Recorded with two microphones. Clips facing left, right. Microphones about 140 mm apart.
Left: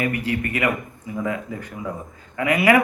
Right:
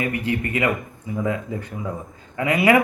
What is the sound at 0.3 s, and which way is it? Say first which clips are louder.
A man's voice: right 1 dB; 25° right (ahead or behind).